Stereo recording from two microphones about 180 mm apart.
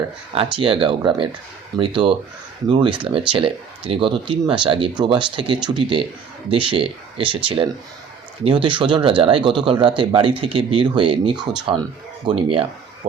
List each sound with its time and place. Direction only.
0.5 s speech: 30° right (ahead or behind)